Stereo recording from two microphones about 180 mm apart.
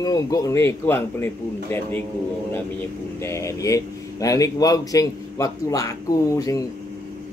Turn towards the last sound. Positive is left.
turn(degrees=20)  # may be behind; listen again after turning